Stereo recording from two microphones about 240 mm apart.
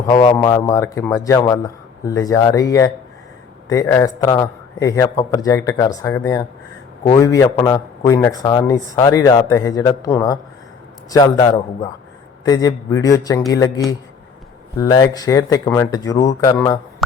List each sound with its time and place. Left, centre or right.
0.1 s a man's voice: centre